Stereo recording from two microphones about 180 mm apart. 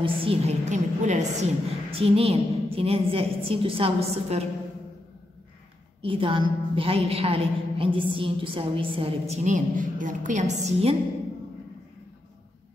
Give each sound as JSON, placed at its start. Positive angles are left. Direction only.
{"t": 0.0, "sound": "a woman's voice", "side_deg": -30}
{"t": 6.0, "sound": "a woman's voice", "side_deg": -30}
{"t": 9.3, "sound": "a woman's voice", "side_deg": -45}